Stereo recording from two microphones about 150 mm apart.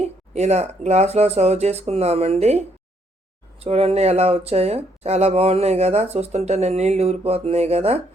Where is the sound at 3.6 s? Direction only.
45° right (ahead or behind).